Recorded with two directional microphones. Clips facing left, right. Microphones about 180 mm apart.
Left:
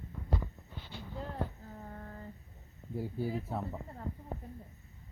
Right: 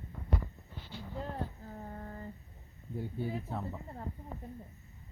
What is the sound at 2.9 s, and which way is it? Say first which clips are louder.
Speech: left 2 dB; 5° left (ahead or behind).